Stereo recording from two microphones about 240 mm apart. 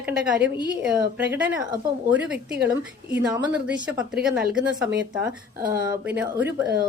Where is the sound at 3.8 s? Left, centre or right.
Centre.